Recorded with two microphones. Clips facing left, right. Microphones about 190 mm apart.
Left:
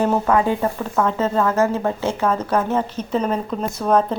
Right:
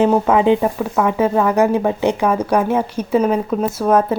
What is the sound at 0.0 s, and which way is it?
Speech, 20° right (ahead or behind).